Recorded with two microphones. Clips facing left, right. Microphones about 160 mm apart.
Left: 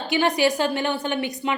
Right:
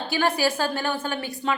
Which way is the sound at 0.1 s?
20° left (ahead or behind).